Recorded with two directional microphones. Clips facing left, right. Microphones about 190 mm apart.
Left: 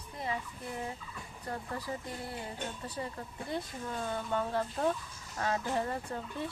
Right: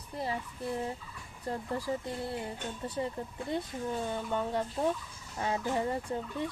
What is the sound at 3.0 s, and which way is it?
Speech, 25° right (ahead or behind).